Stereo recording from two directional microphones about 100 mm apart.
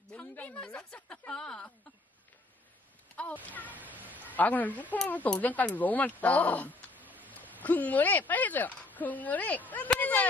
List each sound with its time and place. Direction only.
0.1 s a woman's voice: 15° left (ahead or behind)
3.7 s speech: 15° right (ahead or behind)
4.4 s speech: 15° left (ahead or behind)
6.7 s a sound: 15° right (ahead or behind)
7.2 s speech: 15° left (ahead or behind)